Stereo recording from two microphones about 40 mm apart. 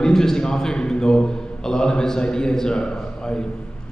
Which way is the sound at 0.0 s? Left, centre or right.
Centre.